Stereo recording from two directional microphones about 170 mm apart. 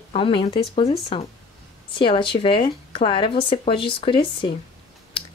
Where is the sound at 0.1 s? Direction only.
30° left (ahead or behind).